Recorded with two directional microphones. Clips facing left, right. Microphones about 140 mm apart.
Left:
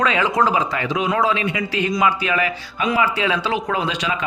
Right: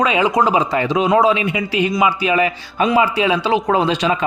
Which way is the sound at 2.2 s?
25° right (ahead or behind).